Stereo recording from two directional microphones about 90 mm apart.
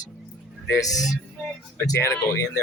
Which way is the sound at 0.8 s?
40° left (ahead or behind).